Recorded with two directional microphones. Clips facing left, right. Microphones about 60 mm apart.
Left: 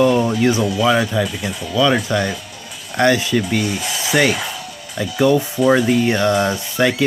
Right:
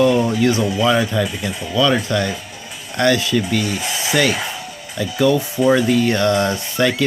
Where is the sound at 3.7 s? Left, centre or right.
Right.